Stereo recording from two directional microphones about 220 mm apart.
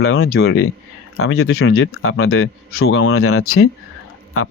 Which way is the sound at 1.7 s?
70° left (ahead or behind).